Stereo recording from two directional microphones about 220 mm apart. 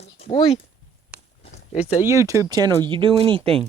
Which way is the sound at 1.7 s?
5° right (ahead or behind).